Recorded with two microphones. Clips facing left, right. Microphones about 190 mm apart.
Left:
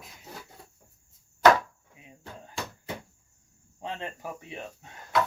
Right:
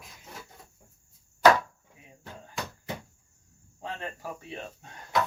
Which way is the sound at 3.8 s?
20° left (ahead or behind).